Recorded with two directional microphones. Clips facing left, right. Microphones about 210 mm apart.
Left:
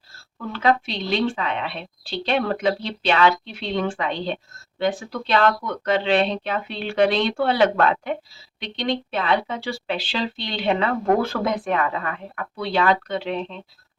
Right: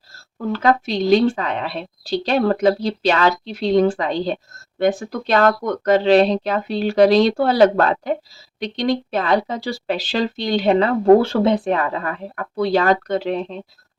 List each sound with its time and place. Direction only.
0.5 s speech: 45° right (ahead or behind)